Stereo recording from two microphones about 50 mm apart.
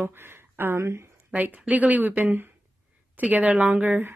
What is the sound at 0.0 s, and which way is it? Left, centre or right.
Speech, right.